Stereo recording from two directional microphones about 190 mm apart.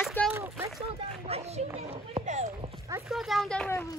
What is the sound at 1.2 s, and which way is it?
Speech, 35° right (ahead or behind).